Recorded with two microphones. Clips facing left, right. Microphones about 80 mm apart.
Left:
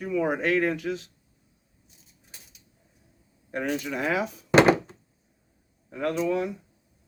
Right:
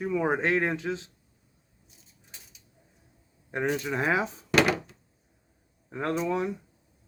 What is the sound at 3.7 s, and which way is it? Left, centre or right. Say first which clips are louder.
Speech: even; right.